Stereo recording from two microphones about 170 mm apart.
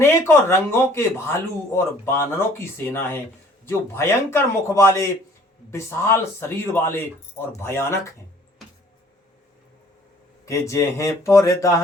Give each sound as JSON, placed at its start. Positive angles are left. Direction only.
{"t": 0.0, "sound": "speech", "side_deg": 15}
{"t": 10.4, "sound": "speech", "side_deg": 15}